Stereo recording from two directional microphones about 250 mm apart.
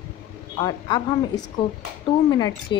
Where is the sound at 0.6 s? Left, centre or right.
Centre.